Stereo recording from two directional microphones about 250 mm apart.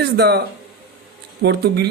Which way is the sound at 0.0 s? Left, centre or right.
Right.